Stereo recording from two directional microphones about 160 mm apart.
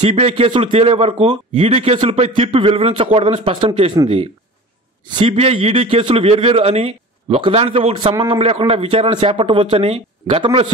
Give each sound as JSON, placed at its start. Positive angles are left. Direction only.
{"t": 0.0, "sound": "speech", "side_deg": -40}
{"t": 5.1, "sound": "a man's voice", "side_deg": -35}
{"t": 8.4, "sound": "speech", "side_deg": -35}